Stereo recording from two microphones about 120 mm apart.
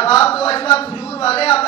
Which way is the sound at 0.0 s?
55° left (ahead or behind).